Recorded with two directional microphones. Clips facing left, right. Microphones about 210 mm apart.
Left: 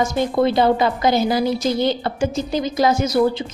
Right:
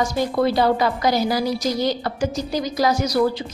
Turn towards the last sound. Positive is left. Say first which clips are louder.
# left 2 dB
turn(degrees=25)  # may be behind; listen again after turning